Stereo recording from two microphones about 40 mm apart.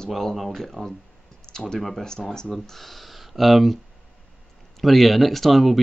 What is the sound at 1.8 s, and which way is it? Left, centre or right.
Speech, centre.